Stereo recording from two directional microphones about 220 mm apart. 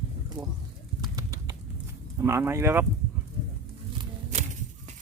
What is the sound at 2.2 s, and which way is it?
Speech, 10° right (ahead or behind).